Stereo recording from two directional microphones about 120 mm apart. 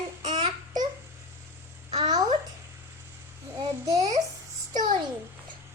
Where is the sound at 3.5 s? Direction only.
30° right (ahead or behind).